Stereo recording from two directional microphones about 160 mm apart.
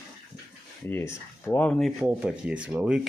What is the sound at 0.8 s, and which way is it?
Speech, 15° left (ahead or behind).